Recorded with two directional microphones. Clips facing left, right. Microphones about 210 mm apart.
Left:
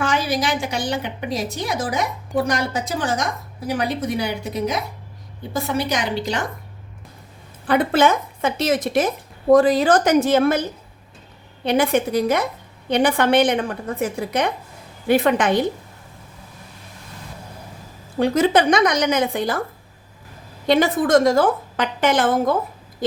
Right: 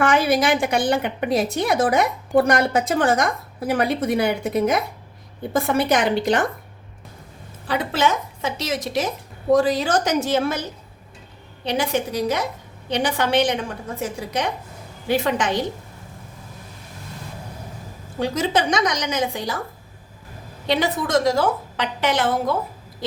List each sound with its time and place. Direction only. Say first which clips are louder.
0.0 s a woman's voice: right 4 dB; 55° right (ahead or behind)
7.7 s a woman's voice: left 5 dB; 55° left (ahead or behind)
18.2 s a woman's voice: left 5 dB; 60° left (ahead or behind)
20.7 s a woman's voice: left 5 dB; 50° left (ahead or behind)